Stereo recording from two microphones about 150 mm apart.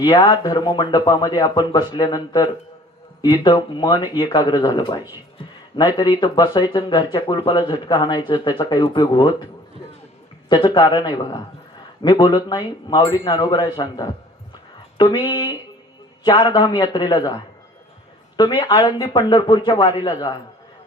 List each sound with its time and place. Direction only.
0.0 s speech: 25° left (ahead or behind)
10.5 s speech: 30° left (ahead or behind)
16.2 s speech: 25° left (ahead or behind)
18.4 s speech: 30° left (ahead or behind)